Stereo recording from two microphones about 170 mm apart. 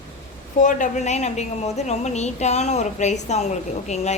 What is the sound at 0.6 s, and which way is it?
A woman's voice, 50° left (ahead or behind).